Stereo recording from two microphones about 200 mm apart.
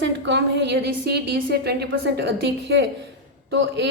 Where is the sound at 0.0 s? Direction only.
60° right (ahead or behind).